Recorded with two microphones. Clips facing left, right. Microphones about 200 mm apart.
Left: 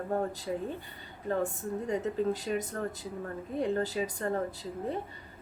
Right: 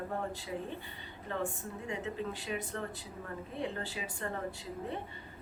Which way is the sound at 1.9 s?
40° left (ahead or behind).